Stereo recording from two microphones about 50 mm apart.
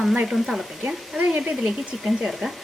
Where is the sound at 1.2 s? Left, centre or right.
Right.